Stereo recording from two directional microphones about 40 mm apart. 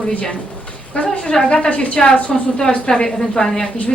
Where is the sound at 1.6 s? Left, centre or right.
Left.